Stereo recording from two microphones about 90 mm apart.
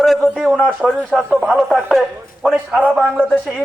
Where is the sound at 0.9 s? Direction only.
10° left (ahead or behind).